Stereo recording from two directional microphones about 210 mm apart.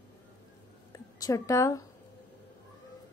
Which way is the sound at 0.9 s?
15° left (ahead or behind).